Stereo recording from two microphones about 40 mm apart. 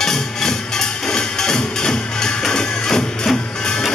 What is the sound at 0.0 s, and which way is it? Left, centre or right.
Music, centre.